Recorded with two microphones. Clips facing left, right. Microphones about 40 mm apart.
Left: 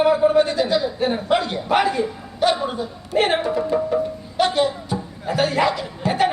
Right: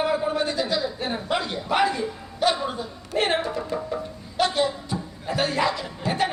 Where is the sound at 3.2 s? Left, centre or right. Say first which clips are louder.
Left 3 dB; left.